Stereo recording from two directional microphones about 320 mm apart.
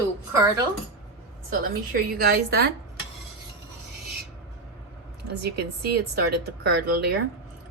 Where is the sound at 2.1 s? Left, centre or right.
Right.